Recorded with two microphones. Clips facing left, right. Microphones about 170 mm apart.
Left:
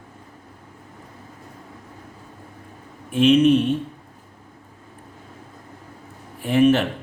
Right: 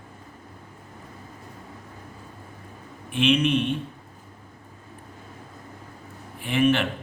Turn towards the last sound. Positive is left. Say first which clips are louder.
# left 5 dB
turn(degrees=40)  # may be behind; listen again after turning